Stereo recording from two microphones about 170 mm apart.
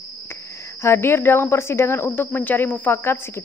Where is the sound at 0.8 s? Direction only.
15° left (ahead or behind).